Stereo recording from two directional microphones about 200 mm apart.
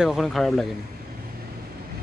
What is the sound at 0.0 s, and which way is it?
Speech, centre (ahead or behind).